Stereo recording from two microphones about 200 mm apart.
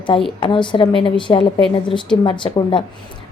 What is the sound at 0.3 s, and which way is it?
A woman's voice, 25° left (ahead or behind).